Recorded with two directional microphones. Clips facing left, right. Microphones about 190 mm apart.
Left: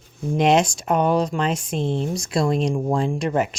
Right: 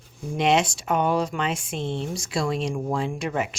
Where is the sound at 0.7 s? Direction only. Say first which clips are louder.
Left 3 dB; 40° left (ahead or behind).